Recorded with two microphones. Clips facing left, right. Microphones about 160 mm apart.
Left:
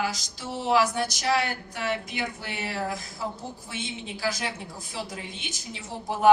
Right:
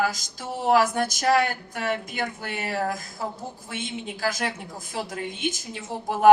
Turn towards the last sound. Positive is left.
turn(degrees=-50)  # may be behind; listen again after turning